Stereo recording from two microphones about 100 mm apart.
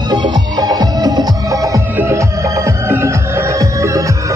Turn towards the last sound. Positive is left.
turn(degrees=-30)  # may be behind; listen again after turning